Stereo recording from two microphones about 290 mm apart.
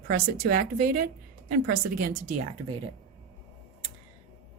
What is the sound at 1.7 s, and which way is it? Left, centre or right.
Speech, right.